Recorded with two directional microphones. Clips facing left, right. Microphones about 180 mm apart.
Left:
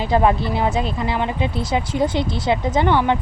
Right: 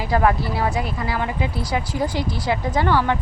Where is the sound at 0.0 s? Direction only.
20° left (ahead or behind).